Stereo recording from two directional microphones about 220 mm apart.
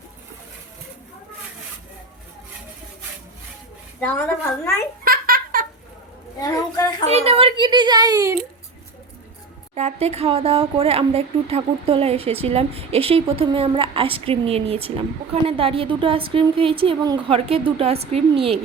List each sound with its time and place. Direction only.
5.0 s giggle: 40° right (ahead or behind)
6.4 s a woman's voice: 15° left (ahead or behind)
7.0 s speech: 30° right (ahead or behind)
9.7 s speech: 30° right (ahead or behind)